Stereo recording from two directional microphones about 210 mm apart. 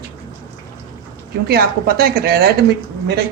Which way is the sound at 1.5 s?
45° right (ahead or behind).